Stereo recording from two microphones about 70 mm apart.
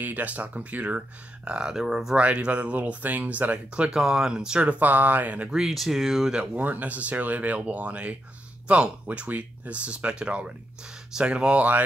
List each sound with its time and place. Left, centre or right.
0.0 s speech: right; by 2.1 s centre
2.1 s speech: centre
5.6 s speech: centre
6.5 s speech: right